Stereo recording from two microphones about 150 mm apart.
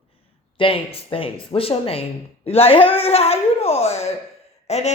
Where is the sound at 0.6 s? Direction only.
40° left (ahead or behind).